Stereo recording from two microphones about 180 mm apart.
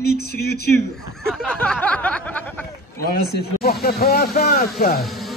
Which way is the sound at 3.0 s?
60° left (ahead or behind).